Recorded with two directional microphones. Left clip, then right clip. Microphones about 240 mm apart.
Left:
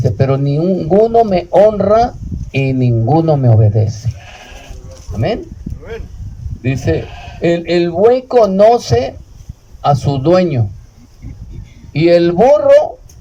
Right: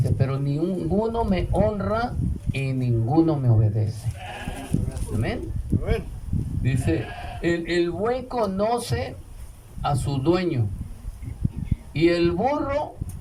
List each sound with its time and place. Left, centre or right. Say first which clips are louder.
0.0 s speech: left 14 dB; left
6.6 s speech: left 10 dB; left
11.9 s speech: left 12 dB; left